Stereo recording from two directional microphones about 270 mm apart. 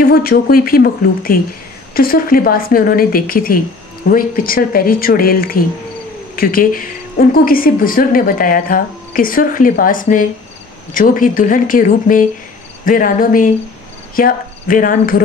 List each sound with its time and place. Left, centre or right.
0.0 s a woman's voice: left